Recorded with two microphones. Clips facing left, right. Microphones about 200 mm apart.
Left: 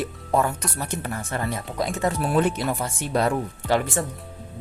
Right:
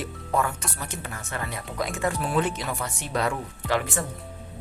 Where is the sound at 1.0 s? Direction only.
35° left (ahead or behind).